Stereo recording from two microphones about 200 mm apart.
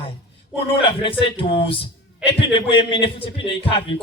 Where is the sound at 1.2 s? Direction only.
25° left (ahead or behind).